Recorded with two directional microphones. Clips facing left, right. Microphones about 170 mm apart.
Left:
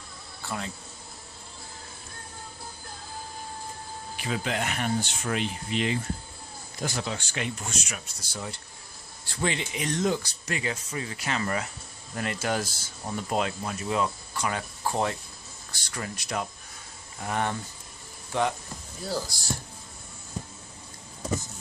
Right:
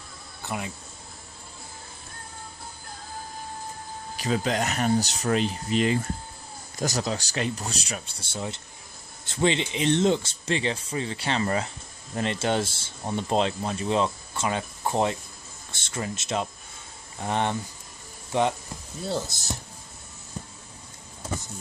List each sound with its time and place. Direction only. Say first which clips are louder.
0.4 s insect: right 2 dB; 20° right (ahead or behind)
4.2 s speech: right 4 dB; 40° right (ahead or behind); by 19.6 s 20° right (ahead or behind)